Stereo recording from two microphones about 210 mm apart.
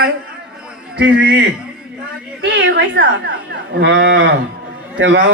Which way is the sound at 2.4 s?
55° right (ahead or behind).